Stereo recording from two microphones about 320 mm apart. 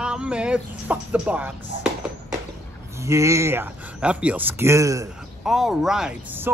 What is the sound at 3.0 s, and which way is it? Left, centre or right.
Speech, centre.